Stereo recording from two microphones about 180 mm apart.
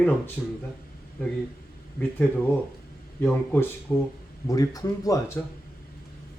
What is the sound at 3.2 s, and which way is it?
Speech, 10° left (ahead or behind).